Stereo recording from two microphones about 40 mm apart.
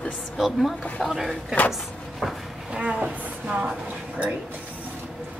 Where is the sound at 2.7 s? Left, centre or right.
Right.